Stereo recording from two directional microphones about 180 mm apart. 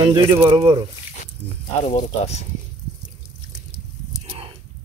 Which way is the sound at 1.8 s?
35° left (ahead or behind).